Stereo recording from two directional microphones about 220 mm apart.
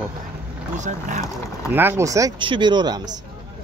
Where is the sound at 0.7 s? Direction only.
35° right (ahead or behind).